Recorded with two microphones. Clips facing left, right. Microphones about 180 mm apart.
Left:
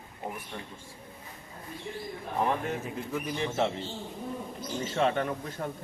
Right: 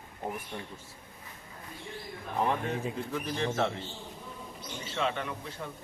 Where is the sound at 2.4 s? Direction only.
5° left (ahead or behind).